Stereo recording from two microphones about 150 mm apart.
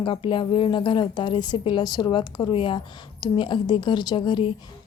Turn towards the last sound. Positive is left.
turn(degrees=30)  # may be behind; listen again after turning